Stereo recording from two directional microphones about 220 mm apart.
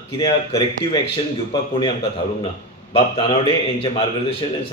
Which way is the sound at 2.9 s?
25° left (ahead or behind).